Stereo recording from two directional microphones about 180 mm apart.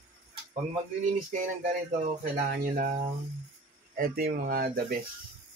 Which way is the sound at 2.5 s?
55° right (ahead or behind).